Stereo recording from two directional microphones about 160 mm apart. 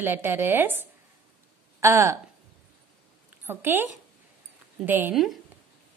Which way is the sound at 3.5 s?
15° right (ahead or behind).